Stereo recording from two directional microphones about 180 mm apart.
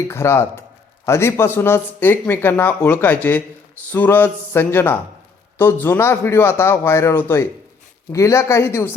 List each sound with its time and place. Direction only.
0.1 s speech: 15° left (ahead or behind)